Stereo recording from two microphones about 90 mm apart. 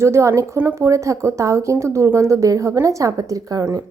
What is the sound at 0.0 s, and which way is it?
Speech, 30° right (ahead or behind).